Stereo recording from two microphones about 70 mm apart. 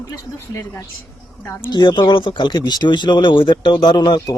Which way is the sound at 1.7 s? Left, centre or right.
Left.